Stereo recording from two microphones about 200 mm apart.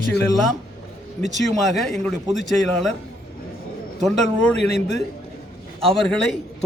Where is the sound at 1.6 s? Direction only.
Centre (ahead or behind).